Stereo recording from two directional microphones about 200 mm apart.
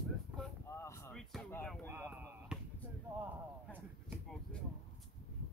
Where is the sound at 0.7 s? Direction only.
15° left (ahead or behind).